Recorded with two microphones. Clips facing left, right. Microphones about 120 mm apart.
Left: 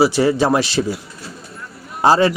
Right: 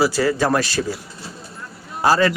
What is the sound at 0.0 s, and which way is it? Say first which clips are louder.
Speech: left 3 dB; 20° left (ahead or behind).